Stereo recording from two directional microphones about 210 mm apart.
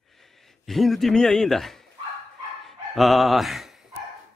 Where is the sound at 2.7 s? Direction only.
Centre (ahead or behind).